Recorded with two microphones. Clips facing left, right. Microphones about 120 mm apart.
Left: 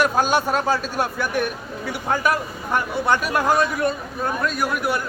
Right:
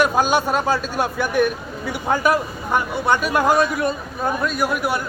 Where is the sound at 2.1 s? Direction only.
30° right (ahead or behind).